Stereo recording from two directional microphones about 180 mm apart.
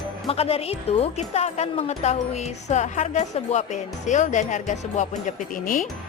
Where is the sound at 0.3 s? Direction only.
35° left (ahead or behind).